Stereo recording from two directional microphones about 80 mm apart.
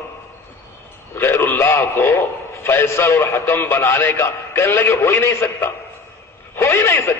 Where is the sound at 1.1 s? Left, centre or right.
Left.